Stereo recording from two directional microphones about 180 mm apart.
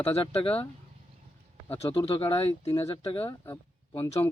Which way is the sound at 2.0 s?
30° left (ahead or behind).